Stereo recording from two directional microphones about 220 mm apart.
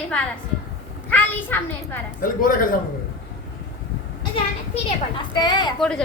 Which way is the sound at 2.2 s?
40° left (ahead or behind).